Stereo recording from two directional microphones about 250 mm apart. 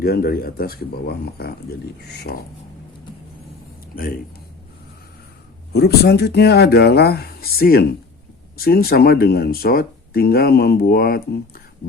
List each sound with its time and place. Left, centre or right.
0.0 s speech: left
5.7 s speech: left